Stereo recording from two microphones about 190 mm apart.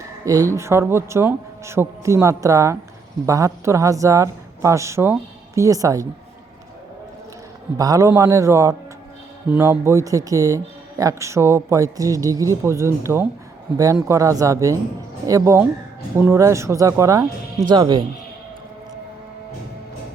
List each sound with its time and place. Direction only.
0.3 s speech: 15° right (ahead or behind)
7.8 s speech: 15° right (ahead or behind)